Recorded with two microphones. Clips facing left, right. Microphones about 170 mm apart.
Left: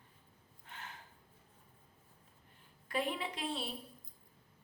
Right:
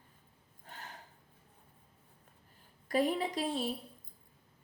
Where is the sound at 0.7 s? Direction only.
40° right (ahead or behind).